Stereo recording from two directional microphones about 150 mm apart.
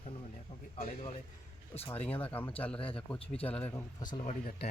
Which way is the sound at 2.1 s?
10° left (ahead or behind).